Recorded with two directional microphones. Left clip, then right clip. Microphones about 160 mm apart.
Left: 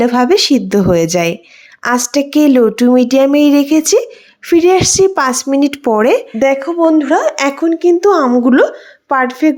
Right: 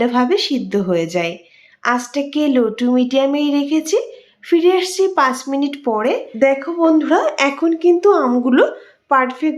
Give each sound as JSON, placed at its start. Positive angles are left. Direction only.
{"t": 0.0, "sound": "speech", "side_deg": 45}
{"t": 6.4, "sound": "speech", "side_deg": 30}